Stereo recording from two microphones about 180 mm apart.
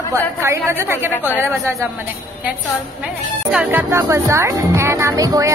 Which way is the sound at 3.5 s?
5° right (ahead or behind).